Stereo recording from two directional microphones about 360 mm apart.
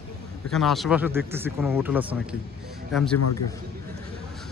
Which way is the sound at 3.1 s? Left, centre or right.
Left.